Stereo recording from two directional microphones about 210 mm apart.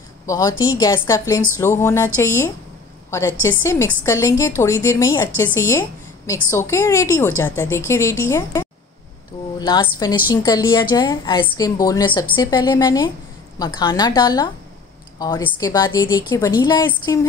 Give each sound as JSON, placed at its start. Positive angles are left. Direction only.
{"t": 0.3, "sound": "a woman's voice", "side_deg": 15}